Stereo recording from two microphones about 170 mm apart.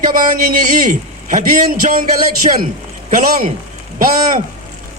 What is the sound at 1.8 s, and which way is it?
Speech, 45° right (ahead or behind).